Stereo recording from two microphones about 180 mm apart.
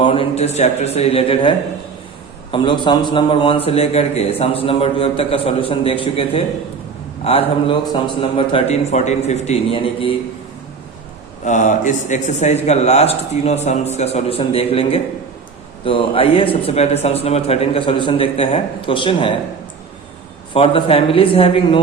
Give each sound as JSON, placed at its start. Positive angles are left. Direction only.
{"t": 0.0, "sound": "a man's voice", "side_deg": 30}
{"t": 11.4, "sound": "a man's voice", "side_deg": 45}
{"t": 20.5, "sound": "a man's voice", "side_deg": 30}